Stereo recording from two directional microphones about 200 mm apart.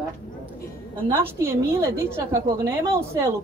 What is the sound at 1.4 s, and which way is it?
Speech, 10° right (ahead or behind).